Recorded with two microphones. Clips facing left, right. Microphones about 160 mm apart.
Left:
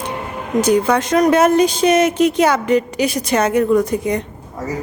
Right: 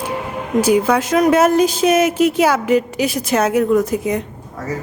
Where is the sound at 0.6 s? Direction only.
5° right (ahead or behind).